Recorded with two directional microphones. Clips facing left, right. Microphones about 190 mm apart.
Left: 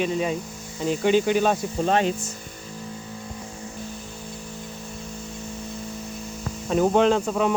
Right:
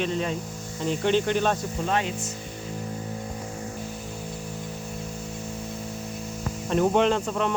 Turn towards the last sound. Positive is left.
turn(degrees=5)  # may be behind; listen again after turning